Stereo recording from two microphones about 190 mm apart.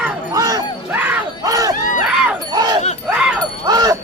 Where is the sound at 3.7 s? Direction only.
20° right (ahead or behind).